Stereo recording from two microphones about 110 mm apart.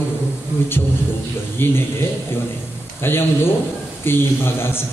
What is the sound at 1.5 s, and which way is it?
A man's voice, 20° left (ahead or behind).